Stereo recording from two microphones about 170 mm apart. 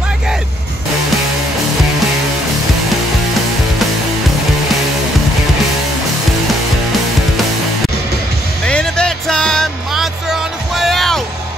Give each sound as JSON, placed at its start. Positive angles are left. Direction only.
{"t": 8.6, "sound": "music", "side_deg": 5}